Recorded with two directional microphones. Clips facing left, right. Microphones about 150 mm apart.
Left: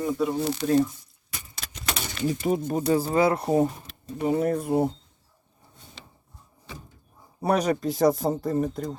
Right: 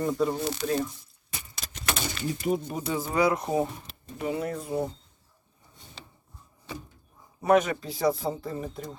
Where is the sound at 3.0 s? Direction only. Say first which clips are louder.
Left 3 dB; 30° left (ahead or behind).